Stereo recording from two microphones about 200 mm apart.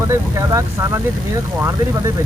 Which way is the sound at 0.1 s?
15° right (ahead or behind).